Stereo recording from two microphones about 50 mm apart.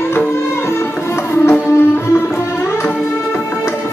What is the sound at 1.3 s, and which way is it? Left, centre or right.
Music, left.